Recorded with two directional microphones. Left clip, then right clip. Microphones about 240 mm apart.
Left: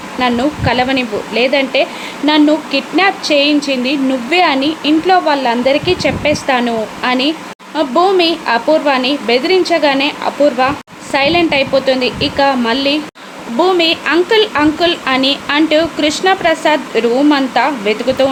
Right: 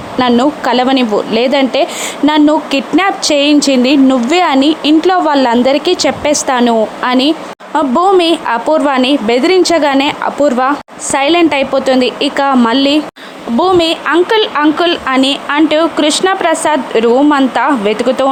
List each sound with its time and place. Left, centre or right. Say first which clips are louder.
0.2 s speech: right 4 dB; right